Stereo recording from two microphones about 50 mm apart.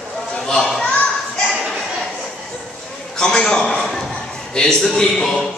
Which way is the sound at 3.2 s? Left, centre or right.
Centre.